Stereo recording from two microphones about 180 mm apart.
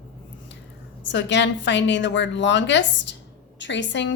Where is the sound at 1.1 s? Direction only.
80° left.